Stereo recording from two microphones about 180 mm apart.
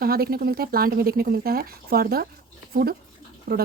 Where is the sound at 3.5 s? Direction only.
55° right (ahead or behind).